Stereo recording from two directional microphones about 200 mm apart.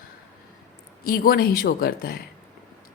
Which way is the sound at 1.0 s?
50° left (ahead or behind).